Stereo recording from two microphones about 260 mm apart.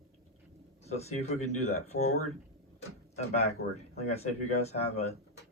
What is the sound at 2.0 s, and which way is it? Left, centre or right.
Speech, left.